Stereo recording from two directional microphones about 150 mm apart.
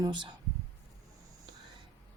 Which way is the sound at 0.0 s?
30° right (ahead or behind).